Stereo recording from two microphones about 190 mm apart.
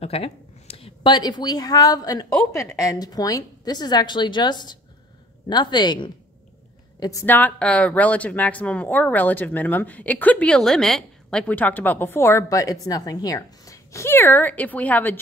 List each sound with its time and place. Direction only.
0.0 s a woman's voice: 30° left (ahead or behind); by 15.1 s 10° left (ahead or behind)